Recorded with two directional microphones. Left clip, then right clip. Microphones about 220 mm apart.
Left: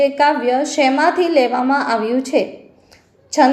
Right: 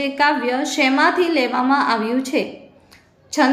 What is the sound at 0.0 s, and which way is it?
A woman's voice, centre (ahead or behind).